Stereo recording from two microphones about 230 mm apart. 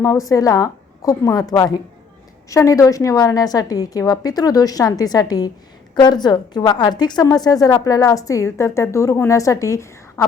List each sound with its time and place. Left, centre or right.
0.0 s a woman's voice: centre